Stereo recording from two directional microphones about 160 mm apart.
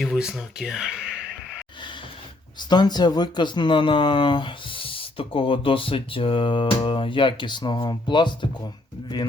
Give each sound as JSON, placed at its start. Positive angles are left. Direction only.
{"t": 0.0, "sound": "speech", "side_deg": 0}
{"t": 2.6, "sound": "speech", "side_deg": 25}